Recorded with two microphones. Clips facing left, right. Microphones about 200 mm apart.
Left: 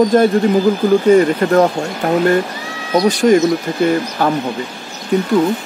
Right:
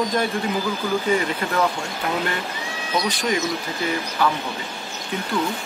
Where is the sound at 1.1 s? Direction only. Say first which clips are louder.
Left 13 dB; 45° left (ahead or behind).